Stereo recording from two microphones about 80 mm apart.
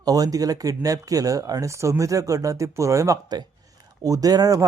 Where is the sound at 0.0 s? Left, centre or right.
Right.